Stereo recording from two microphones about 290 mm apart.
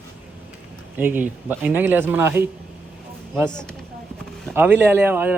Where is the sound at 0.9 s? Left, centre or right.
Centre.